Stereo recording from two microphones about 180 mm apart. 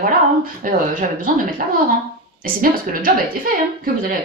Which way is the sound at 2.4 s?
50° right (ahead or behind).